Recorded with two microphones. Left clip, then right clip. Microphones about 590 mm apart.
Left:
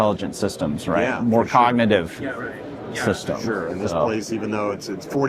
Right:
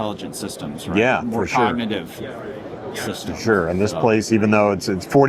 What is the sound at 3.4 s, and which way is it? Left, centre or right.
Speech, right.